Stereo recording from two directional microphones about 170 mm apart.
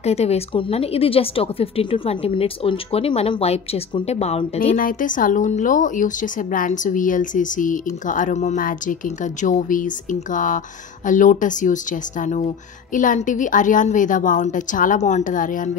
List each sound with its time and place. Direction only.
0.0 s a woman's voice: 40° left (ahead or behind)
4.7 s speech: 55° left (ahead or behind)